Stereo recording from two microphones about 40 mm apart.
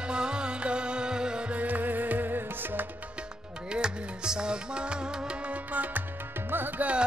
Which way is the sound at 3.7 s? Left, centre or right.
Centre.